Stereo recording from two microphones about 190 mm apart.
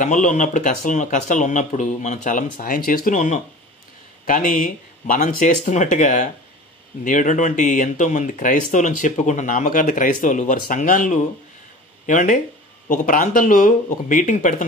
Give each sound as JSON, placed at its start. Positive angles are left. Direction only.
{"t": 0.0, "sound": "speech", "side_deg": 40}